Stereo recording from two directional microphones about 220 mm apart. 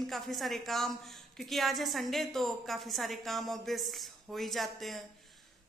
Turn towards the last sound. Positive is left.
turn(degrees=0)  # may be behind; listen again after turning